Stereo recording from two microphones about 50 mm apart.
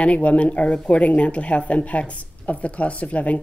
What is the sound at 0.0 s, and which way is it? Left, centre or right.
A woman's voice, left.